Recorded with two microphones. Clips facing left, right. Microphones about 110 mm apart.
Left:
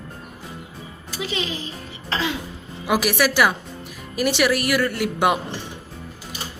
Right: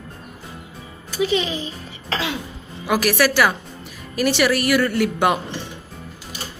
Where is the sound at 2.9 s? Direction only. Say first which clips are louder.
Right 2 dB; 15° left (ahead or behind).